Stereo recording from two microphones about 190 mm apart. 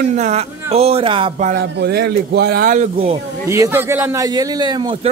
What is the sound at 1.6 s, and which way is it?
Speech, 60° right (ahead or behind).